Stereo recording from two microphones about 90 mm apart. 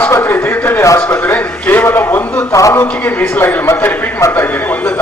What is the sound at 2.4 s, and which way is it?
Speech, 35° left (ahead or behind).